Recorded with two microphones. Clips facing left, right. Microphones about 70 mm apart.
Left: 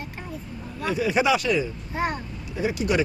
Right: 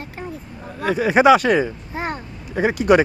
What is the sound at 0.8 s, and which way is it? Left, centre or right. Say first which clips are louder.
Speech: right 6 dB; right.